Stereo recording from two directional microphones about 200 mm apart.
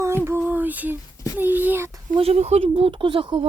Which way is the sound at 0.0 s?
10° right (ahead or behind).